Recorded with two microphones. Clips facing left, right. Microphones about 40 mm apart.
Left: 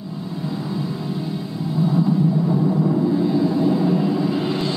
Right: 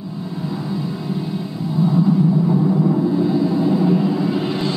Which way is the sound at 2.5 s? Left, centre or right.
Centre.